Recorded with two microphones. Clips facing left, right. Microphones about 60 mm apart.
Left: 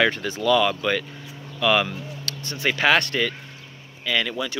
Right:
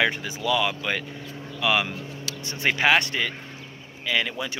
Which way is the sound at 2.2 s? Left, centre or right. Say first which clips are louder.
Even; right.